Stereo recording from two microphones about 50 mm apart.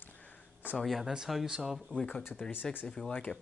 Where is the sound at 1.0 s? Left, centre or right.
Centre.